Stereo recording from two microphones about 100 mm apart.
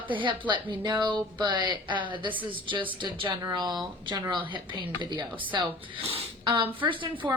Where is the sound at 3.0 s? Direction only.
50° right (ahead or behind).